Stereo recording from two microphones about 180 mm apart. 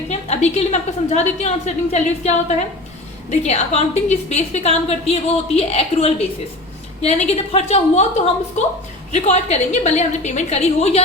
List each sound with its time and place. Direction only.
0.1 s a woman's voice: 40° left (ahead or behind)